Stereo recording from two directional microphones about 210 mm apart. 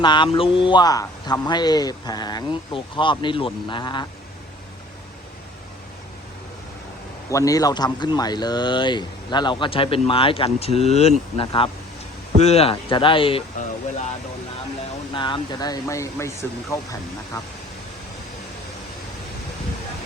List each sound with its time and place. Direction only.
0.0 s a man's voice: 20° left (ahead or behind)
7.3 s a man's voice: 15° left (ahead or behind)
15.1 s speech: 20° left (ahead or behind)